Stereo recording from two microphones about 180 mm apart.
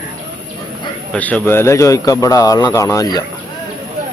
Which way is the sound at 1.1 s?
10° left (ahead or behind).